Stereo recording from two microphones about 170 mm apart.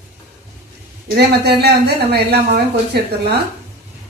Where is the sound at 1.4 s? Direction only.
75° right (ahead or behind).